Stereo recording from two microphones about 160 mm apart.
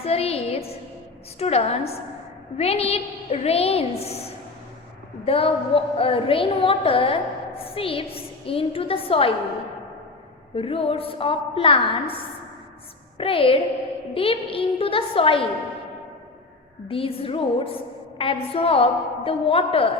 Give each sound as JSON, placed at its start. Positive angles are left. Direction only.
{"t": 0.0, "sound": "a sound", "side_deg": 40}
{"t": 1.4, "sound": "a woman's voice", "side_deg": 40}
{"t": 5.2, "sound": "a woman's voice", "side_deg": 35}
{"t": 10.5, "sound": "a woman's voice", "side_deg": 35}
{"t": 13.1, "sound": "a woman's voice", "side_deg": 35}
{"t": 16.9, "sound": "a woman's voice", "side_deg": 35}